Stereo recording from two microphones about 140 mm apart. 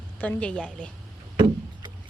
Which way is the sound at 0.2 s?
10° left (ahead or behind).